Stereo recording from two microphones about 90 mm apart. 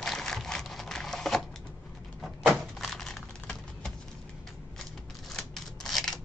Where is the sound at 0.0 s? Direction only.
5° left (ahead or behind).